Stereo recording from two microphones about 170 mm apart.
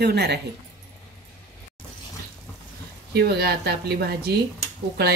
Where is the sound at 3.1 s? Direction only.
75° right (ahead or behind).